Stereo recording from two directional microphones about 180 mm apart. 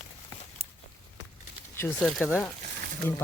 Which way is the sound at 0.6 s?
35° right (ahead or behind).